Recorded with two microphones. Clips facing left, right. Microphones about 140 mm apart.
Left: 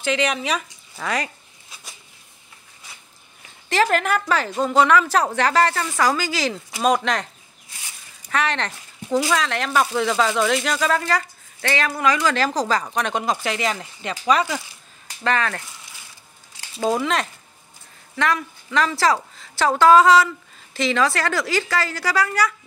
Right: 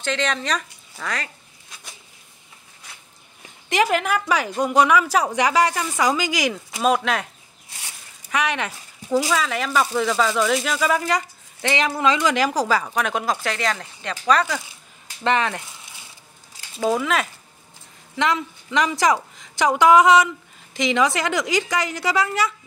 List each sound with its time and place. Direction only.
0.0 s speech: 10° left (ahead or behind)
3.6 s speech: 15° right (ahead or behind)
6.8 s speech: 5° right (ahead or behind)
8.3 s speech: 10° right (ahead or behind); by 14.6 s 5° left (ahead or behind)
15.2 s speech: 20° right (ahead or behind)
16.9 s speech: 5° right (ahead or behind)
18.1 s speech: 20° right (ahead or behind)